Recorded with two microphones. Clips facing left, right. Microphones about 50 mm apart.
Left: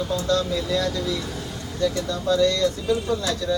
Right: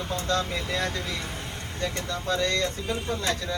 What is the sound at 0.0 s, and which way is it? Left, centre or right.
A man's voice, right.